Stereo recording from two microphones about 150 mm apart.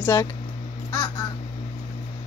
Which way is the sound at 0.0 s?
20° left (ahead or behind).